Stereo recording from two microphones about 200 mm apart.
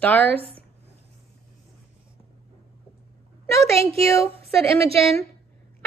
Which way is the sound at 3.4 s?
15° left (ahead or behind).